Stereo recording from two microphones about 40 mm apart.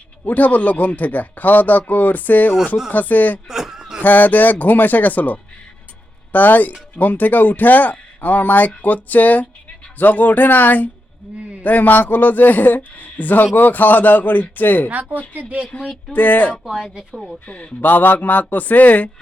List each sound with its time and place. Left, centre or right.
0.3 s speech: left
3.5 s a sound: centre
4.0 s speech: left
14.8 s a woman's voice: right
16.1 s speech: left
16.6 s speech: centre
16.9 s speech: right
17.4 s speech: left
17.7 s speech: left